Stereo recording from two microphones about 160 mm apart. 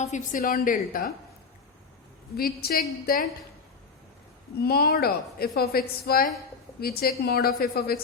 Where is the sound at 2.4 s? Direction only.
70° left (ahead or behind).